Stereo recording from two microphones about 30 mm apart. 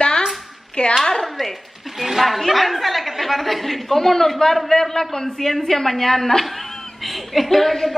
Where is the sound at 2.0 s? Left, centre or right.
Centre.